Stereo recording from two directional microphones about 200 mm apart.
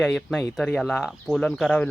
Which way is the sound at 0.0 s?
Centre (ahead or behind).